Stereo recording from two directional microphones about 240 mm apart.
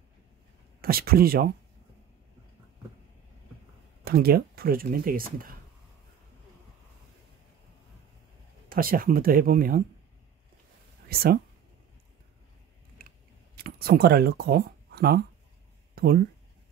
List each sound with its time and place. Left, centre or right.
0.7 s speech: right
4.0 s speech: right
8.6 s speech: right
11.1 s speech: right
13.6 s speech: right
15.9 s a sound: right